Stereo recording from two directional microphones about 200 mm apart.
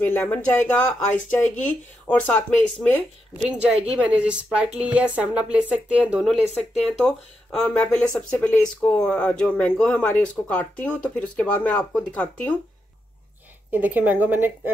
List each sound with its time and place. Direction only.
0.0 s speech: 10° left (ahead or behind)
3.6 s speech: 5° right (ahead or behind)
13.7 s a woman's voice: 10° right (ahead or behind)